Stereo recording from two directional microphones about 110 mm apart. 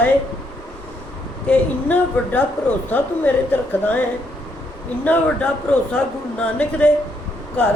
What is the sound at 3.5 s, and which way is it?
Speech, 15° left (ahead or behind).